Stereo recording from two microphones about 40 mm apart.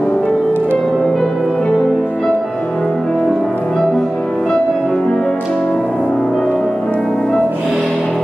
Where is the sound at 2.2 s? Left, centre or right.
Centre.